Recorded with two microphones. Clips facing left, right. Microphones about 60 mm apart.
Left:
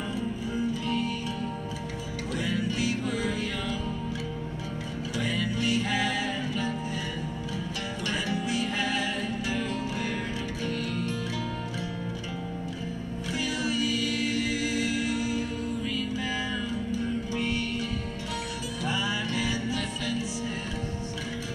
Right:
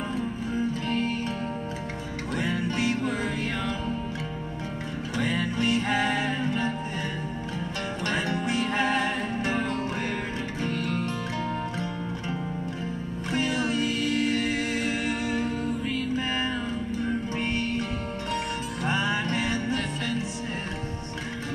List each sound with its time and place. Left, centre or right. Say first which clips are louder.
0.8 s music: right 2 dB; right
2.3 s music: right 2 dB; right
5.1 s music: right 3 dB; right
8.1 s music: right 2 dB; right
13.3 s music: right 4 dB; right
18.9 s music: right 4 dB; right